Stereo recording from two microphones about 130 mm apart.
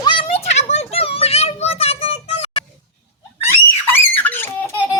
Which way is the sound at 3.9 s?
15° left (ahead or behind).